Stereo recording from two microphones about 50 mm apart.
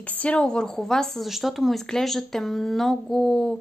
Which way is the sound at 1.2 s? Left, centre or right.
Centre.